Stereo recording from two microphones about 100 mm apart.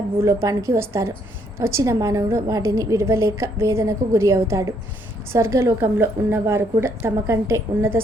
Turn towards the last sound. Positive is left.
turn(degrees=-25)  # may be behind; listen again after turning